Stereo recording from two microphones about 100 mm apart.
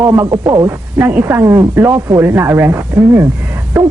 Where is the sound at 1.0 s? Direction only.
25° right (ahead or behind).